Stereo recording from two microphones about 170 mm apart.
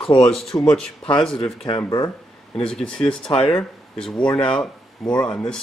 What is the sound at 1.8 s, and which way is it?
Speech, 20° left (ahead or behind).